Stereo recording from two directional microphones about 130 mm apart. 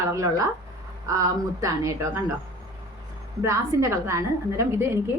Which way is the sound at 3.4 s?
20° right (ahead or behind).